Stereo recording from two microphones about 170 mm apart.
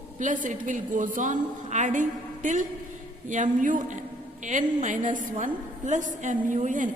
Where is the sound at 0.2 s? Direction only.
50° right (ahead or behind).